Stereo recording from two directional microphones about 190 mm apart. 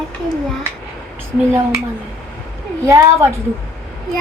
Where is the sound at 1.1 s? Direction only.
10° right (ahead or behind).